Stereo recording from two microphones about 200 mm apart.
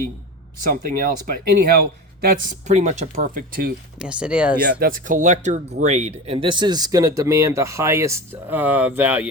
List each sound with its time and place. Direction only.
0.7 s speech: 45° right (ahead or behind)
3.9 s speech: 5° right (ahead or behind)
4.8 s speech: 40° right (ahead or behind); by 9.3 s 10° right (ahead or behind)